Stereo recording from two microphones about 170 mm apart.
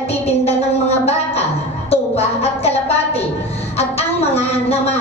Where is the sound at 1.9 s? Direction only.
35° left (ahead or behind).